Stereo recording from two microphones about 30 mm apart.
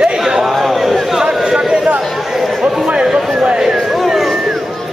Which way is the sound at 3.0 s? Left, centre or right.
Right.